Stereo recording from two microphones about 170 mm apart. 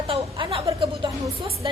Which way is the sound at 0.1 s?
30° right (ahead or behind).